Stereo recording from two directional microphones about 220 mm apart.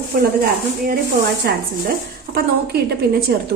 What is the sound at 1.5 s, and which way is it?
Speech, 45° right (ahead or behind).